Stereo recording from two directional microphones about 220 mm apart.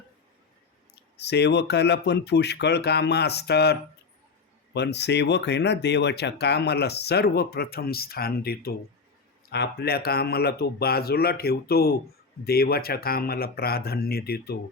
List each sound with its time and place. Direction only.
1.1 s speech: 50° left (ahead or behind)